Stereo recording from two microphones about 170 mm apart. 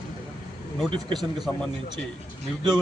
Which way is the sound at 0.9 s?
30° right (ahead or behind).